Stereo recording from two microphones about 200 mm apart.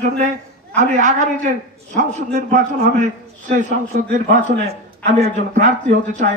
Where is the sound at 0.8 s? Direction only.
35° right (ahead or behind).